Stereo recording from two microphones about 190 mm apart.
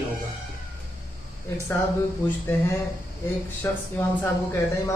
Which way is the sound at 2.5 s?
10° left (ahead or behind).